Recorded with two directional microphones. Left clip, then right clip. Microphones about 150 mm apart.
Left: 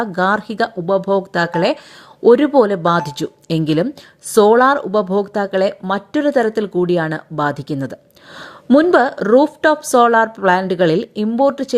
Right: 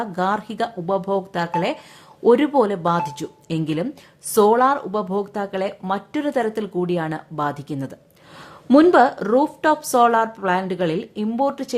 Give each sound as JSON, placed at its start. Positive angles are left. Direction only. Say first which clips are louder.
{"t": 0.0, "sound": "a woman's voice", "louder": "left 6 dB", "side_deg": 25}